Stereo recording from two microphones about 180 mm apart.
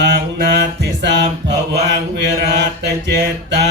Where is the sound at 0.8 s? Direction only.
75° right (ahead or behind).